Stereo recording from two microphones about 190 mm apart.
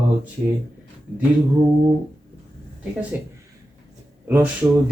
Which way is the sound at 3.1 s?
10° right (ahead or behind).